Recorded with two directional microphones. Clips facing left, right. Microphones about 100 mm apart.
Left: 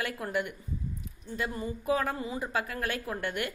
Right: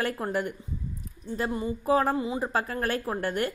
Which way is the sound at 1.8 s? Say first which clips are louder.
Right 5 dB; 35° right (ahead or behind).